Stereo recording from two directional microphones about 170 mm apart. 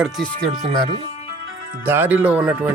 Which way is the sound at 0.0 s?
Centre (ahead or behind).